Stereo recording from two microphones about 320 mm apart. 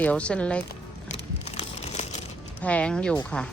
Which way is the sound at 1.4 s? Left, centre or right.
Centre.